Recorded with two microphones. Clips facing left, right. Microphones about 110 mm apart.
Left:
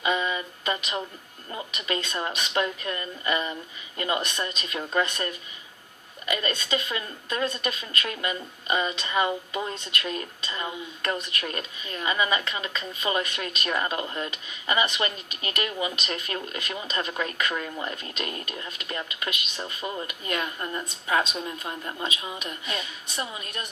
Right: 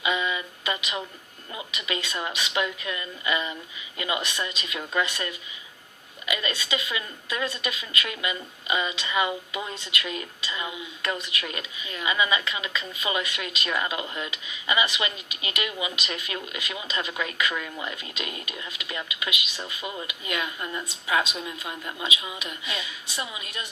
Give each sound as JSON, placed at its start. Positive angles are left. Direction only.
{"t": 0.0, "sound": "music", "side_deg": 35}
{"t": 1.7, "sound": "a woman's voice", "side_deg": 40}
{"t": 19.8, "sound": "speech", "side_deg": -10}
{"t": 20.1, "sound": "a woman's voice", "side_deg": 40}